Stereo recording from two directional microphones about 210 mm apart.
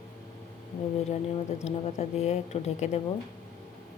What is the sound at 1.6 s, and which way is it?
Speech, 30° left (ahead or behind).